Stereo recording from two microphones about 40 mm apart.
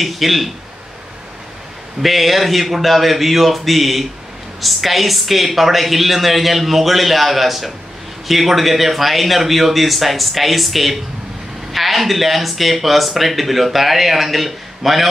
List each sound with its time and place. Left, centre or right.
0.0 s speech: centre
2.0 s speech: centre